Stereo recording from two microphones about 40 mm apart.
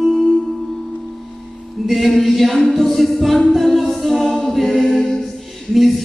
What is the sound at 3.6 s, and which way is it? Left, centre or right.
A capella, centre.